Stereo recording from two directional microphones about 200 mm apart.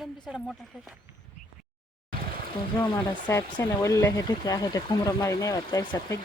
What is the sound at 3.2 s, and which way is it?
Speech, 15° left (ahead or behind).